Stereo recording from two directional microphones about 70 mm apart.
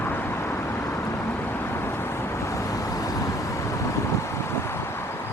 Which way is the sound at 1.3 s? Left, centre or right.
Left.